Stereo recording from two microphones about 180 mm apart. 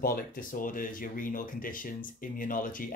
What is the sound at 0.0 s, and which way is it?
Speech, 50° left (ahead or behind).